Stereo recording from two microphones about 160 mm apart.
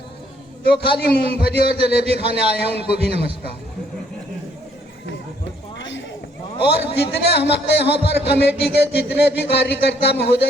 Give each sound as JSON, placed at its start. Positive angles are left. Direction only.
{"t": 0.6, "sound": "a man's voice", "side_deg": 80}
{"t": 6.6, "sound": "a man's voice", "side_deg": 90}